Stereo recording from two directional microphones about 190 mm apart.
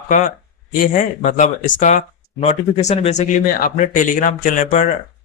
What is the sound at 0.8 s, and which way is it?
Speech, 40° left (ahead or behind).